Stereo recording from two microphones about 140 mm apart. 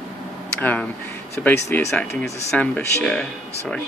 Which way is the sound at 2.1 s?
10° left (ahead or behind).